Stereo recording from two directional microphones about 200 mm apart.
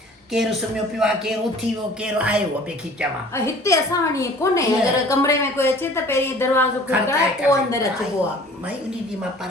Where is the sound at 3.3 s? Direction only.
15° left (ahead or behind).